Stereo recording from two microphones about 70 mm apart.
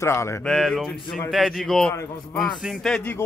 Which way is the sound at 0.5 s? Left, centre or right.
Centre.